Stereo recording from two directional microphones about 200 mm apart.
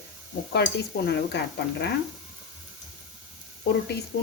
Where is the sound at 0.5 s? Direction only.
55° left (ahead or behind).